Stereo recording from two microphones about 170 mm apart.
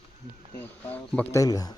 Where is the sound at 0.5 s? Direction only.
10° left (ahead or behind).